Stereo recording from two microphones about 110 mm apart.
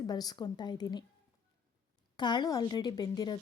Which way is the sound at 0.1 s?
35° left (ahead or behind).